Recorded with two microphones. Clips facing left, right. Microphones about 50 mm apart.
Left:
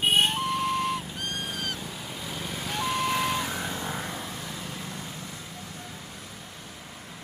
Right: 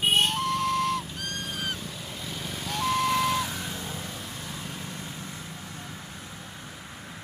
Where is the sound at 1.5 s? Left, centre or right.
Centre.